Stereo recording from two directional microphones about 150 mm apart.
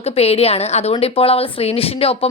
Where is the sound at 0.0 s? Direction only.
45° left (ahead or behind).